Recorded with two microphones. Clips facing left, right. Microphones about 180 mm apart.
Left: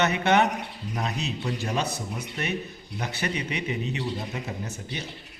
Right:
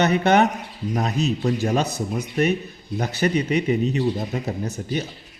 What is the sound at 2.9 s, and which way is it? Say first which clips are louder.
A man's voice: right 9 dB; 40° right (ahead or behind).